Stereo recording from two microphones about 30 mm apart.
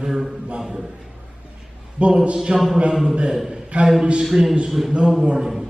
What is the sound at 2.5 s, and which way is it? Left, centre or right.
Speech, right.